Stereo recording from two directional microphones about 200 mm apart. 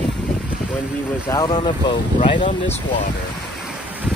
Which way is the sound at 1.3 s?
25° left (ahead or behind).